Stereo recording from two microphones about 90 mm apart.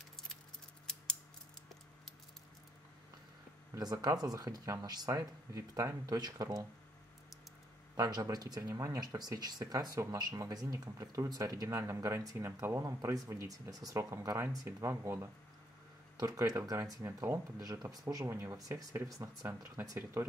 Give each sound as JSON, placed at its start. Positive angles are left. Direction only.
{"t": 3.7, "sound": "speech", "side_deg": -45}
{"t": 7.9, "sound": "speech", "side_deg": -45}
{"t": 16.2, "sound": "speech", "side_deg": -40}